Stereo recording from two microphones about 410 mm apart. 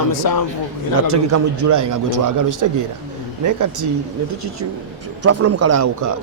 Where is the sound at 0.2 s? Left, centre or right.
Left.